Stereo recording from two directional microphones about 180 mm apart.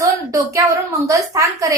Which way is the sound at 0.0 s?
15° right (ahead or behind).